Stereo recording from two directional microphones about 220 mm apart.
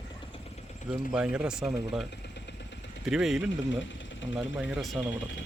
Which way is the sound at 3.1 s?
Centre (ahead or behind).